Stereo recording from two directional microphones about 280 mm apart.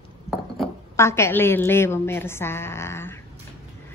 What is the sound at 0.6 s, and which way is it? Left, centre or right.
A woman's voice, centre.